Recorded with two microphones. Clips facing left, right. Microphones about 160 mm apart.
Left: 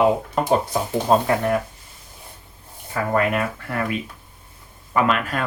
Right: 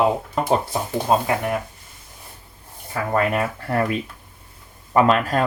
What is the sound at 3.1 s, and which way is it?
Speech, 35° right (ahead or behind).